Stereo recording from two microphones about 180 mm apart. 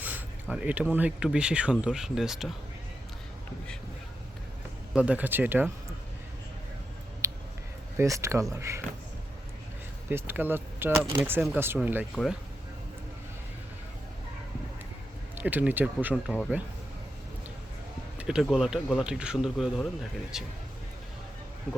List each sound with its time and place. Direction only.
0.0 s speech: 5° right (ahead or behind)
4.9 s speech: 10° right (ahead or behind)
7.2 s a sound: 15° right (ahead or behind)
7.9 s speech: 15° right (ahead or behind)
10.1 s speech: 10° right (ahead or behind)
12.1 s speech: centre (ahead or behind)
15.4 s speech: 10° right (ahead or behind)
18.2 s speech: 5° right (ahead or behind)